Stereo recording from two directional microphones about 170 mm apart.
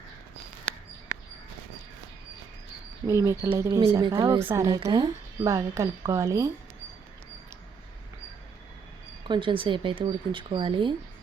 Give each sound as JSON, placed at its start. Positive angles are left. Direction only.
{"t": 3.1, "sound": "a woman's voice", "side_deg": -15}
{"t": 9.2, "sound": "a woman's voice", "side_deg": -30}